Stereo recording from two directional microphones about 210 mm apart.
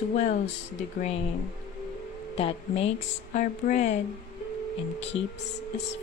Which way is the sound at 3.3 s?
35° left (ahead or behind).